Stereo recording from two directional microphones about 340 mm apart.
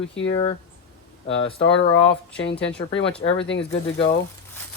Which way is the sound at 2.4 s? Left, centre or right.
Left.